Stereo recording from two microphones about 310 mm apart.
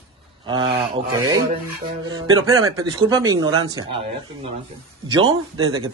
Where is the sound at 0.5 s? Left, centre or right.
Centre.